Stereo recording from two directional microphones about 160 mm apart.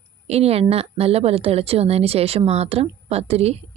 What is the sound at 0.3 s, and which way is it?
A woman's voice, 40° right (ahead or behind).